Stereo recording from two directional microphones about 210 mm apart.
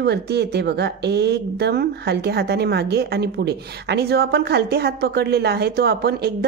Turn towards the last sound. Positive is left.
turn(degrees=-50)  # may be behind; listen again after turning